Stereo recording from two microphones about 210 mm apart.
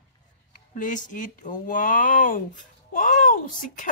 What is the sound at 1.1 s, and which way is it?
Speech, 40° left (ahead or behind).